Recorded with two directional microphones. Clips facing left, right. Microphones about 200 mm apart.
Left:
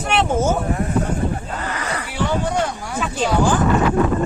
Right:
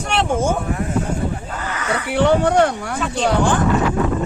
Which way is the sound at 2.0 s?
60° right (ahead or behind).